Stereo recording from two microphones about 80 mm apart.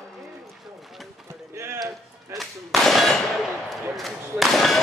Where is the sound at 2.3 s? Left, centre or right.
Centre.